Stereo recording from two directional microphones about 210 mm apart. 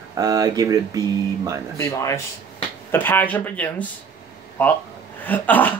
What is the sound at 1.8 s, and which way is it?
Speech, 15° left (ahead or behind).